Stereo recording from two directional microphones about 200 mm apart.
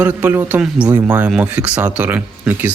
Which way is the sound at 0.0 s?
10° right (ahead or behind).